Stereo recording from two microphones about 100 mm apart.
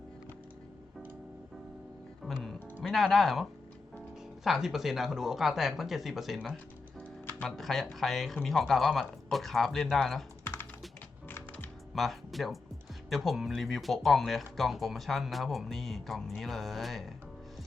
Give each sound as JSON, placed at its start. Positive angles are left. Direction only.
{"t": 2.2, "sound": "music", "side_deg": 0}
{"t": 2.8, "sound": "speech", "side_deg": 0}
{"t": 4.4, "sound": "speech", "side_deg": 0}
{"t": 7.0, "sound": "music", "side_deg": 20}
{"t": 7.4, "sound": "speech", "side_deg": 0}
{"t": 10.4, "sound": "typing", "side_deg": 20}
{"t": 11.3, "sound": "music", "side_deg": 20}
{"t": 11.9, "sound": "speech", "side_deg": 0}